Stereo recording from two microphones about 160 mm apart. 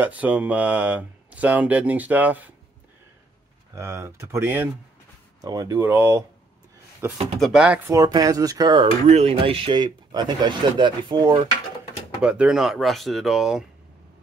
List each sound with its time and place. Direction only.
0.0 s speech: 10° right (ahead or behind)
3.7 s speech: 15° right (ahead or behind)
7.3 s speech: centre (ahead or behind)
7.9 s speech: 25° right (ahead or behind)
9.0 s speech: 40° right (ahead or behind)
12.2 s speech: 5° right (ahead or behind)